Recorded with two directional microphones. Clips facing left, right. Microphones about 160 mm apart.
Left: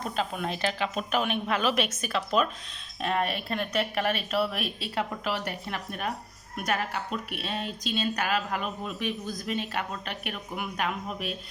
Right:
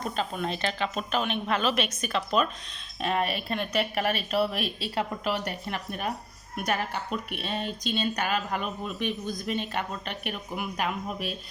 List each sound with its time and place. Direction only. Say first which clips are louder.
0.0 s speech: even; 5° left (ahead or behind)